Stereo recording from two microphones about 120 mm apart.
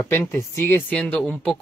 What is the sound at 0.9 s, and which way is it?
Speech, 10° left (ahead or behind).